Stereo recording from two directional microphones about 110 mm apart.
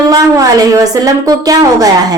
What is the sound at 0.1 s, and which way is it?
A woman's voice, 30° right (ahead or behind).